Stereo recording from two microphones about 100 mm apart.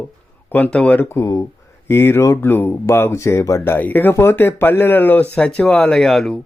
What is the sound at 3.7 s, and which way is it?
Speech, 20° left (ahead or behind).